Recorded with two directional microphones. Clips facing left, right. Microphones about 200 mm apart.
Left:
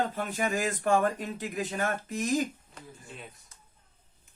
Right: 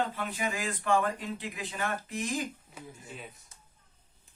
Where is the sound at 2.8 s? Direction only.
10° right (ahead or behind).